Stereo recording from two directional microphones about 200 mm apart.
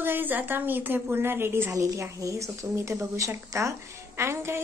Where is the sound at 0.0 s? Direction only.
10° right (ahead or behind).